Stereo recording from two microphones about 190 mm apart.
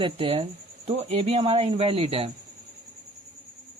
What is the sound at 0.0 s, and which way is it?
Speech, 30° right (ahead or behind).